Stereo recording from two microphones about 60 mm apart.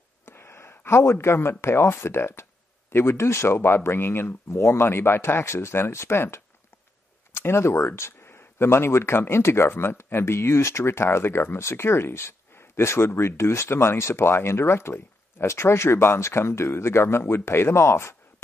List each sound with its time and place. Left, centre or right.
0.2 s speech: left